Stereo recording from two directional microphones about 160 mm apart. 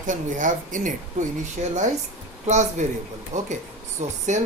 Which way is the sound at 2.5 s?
45° right (ahead or behind).